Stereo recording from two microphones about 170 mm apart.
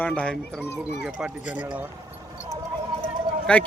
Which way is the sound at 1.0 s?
5° right (ahead or behind).